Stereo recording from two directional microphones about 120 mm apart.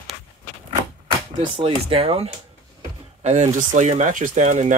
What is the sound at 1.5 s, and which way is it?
Speech, 50° right (ahead or behind).